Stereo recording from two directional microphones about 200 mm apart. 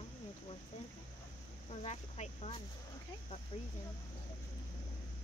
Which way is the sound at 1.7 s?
30° left (ahead or behind).